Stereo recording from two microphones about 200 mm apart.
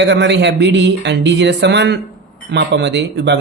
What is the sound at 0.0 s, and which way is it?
Speech, 60° right (ahead or behind).